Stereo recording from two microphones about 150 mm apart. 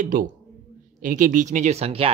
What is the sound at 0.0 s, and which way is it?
Speech, 65° right (ahead or behind).